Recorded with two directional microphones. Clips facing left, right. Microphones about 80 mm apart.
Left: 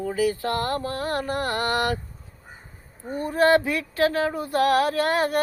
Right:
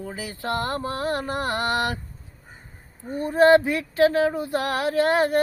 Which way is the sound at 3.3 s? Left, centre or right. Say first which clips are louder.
Right 3 dB; right.